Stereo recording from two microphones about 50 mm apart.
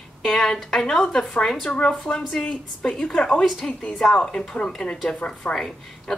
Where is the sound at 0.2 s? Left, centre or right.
Centre.